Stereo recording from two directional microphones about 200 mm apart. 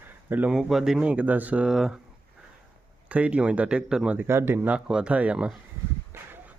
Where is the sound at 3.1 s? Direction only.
5° right (ahead or behind).